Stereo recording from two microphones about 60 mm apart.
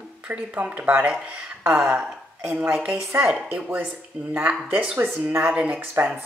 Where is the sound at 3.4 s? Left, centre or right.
Right; by 4.9 s centre.